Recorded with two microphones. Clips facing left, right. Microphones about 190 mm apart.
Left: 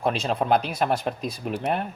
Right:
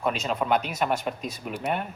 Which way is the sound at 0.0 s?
35° left (ahead or behind).